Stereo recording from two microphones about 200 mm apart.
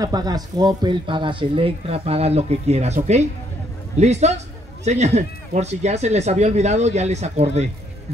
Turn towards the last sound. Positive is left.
turn(degrees=-35)  # may be behind; listen again after turning